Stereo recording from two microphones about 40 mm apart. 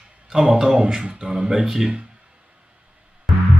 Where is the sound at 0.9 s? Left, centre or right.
Right.